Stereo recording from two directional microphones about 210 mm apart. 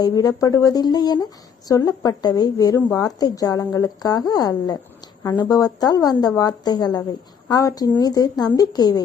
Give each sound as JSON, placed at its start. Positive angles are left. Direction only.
{"t": 0.0, "sound": "speech", "side_deg": 15}